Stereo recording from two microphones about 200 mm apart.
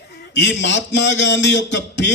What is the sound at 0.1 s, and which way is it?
Speech, 60° left (ahead or behind).